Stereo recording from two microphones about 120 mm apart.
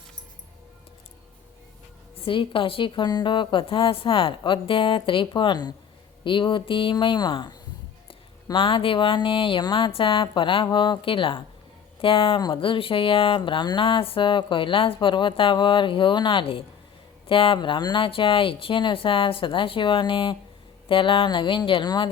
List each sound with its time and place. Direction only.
2.1 s speech: 50° left (ahead or behind)